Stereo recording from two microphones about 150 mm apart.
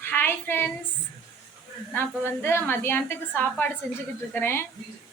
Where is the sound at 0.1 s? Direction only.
15° left (ahead or behind).